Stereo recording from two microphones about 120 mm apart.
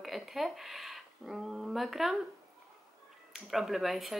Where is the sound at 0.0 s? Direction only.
Centre (ahead or behind).